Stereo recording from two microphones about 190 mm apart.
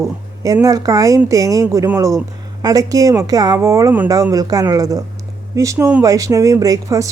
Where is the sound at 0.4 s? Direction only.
15° right (ahead or behind).